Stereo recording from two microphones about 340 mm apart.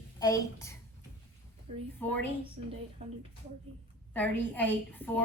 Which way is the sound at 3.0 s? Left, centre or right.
Centre.